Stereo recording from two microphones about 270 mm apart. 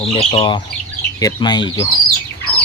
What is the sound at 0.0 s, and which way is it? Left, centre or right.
Speech, left.